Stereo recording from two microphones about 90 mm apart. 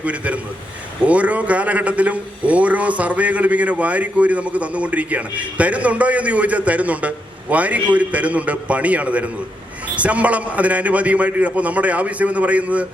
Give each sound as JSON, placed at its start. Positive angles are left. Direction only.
{"t": 0.0, "sound": "a man's voice", "side_deg": -15}